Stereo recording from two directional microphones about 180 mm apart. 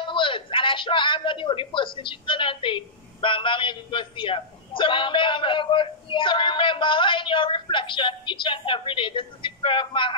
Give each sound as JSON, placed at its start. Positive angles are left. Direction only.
{"t": 0.0, "sound": "a man's voice", "side_deg": 30}